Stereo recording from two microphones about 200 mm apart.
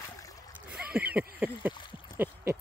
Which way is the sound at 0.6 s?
5° right (ahead or behind).